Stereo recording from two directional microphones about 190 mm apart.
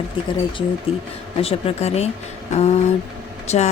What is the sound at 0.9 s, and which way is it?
Speech, 30° left (ahead or behind).